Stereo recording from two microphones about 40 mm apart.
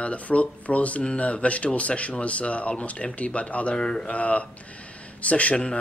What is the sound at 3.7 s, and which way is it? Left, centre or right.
Speech, left.